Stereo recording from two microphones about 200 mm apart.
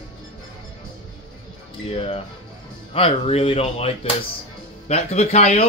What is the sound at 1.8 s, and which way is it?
Music, 30° left (ahead or behind).